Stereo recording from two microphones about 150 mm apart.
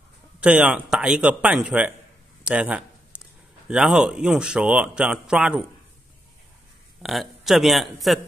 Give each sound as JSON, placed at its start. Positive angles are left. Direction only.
{"t": 0.4, "sound": "speech", "side_deg": -10}
{"t": 2.4, "sound": "a sound", "side_deg": -5}
{"t": 3.6, "sound": "speech", "side_deg": -5}
{"t": 7.0, "sound": "speech", "side_deg": 0}